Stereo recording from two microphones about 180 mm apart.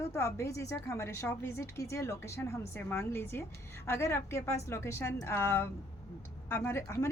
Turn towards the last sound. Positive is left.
turn(degrees=15)  # may be behind; listen again after turning